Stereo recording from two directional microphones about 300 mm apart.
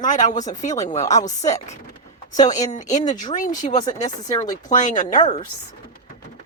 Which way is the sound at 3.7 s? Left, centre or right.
Centre.